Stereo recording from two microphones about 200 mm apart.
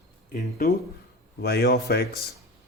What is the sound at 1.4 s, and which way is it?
Speech, 50° left (ahead or behind).